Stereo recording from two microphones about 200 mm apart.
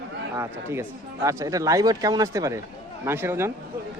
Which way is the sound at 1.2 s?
15° right (ahead or behind).